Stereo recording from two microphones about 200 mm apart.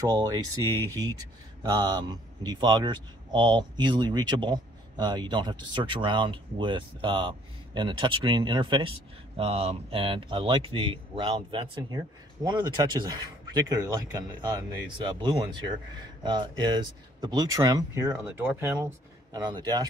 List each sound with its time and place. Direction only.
0.0 s speech: 15° right (ahead or behind)